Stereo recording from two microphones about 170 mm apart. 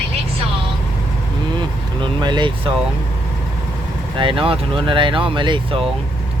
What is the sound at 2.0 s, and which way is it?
Speech, 25° right (ahead or behind).